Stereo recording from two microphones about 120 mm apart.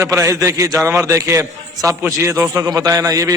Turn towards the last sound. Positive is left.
turn(degrees=-30)  # may be behind; listen again after turning